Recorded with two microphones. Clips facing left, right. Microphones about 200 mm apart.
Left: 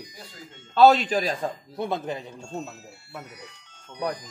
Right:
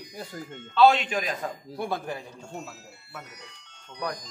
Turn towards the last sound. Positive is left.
turn(degrees=10)  # may be behind; listen again after turning